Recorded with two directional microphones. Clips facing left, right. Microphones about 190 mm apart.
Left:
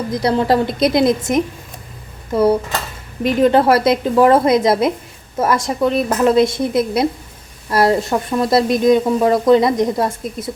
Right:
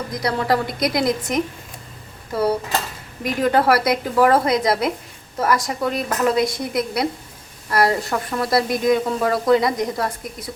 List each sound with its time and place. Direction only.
0.1 s speech: 25° left (ahead or behind)